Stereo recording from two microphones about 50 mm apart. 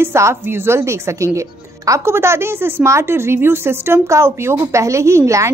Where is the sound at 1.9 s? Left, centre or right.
Right.